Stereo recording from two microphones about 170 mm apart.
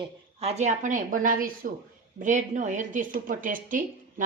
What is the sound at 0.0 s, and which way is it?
A woman's voice, 35° right (ahead or behind).